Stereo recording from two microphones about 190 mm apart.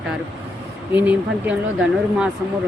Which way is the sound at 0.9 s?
10° right (ahead or behind).